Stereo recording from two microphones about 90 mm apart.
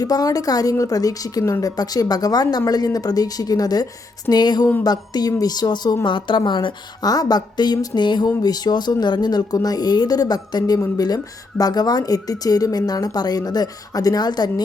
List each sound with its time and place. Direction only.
0.0 s speech: 45° left (ahead or behind)
6.1 s a woman's voice: 65° left (ahead or behind)
7.0 s speech: 45° left (ahead or behind)